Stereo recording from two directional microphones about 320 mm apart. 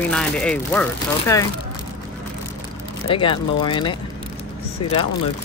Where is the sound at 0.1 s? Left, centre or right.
Centre.